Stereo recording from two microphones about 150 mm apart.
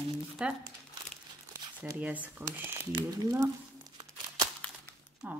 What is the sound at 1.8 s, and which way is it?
Speech, 10° right (ahead or behind).